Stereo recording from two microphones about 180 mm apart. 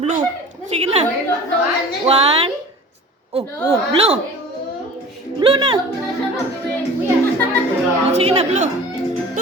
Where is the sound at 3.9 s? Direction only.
35° right (ahead or behind).